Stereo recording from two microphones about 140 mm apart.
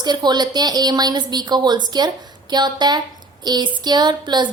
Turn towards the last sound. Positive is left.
turn(degrees=-30)  # may be behind; listen again after turning